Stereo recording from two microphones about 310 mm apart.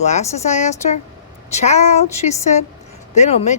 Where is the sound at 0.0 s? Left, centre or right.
Left.